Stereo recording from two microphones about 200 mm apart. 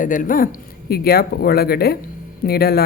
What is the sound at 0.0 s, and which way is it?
Speech, 40° left (ahead or behind).